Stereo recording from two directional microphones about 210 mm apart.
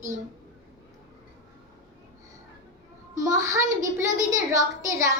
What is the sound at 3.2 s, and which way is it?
A woman's voice, 15° right (ahead or behind).